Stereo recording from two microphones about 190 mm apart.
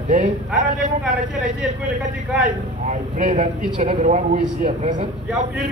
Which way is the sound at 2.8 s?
40° right (ahead or behind).